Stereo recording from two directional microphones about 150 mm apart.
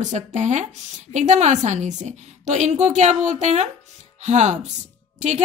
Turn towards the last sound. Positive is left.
turn(degrees=-50)  # may be behind; listen again after turning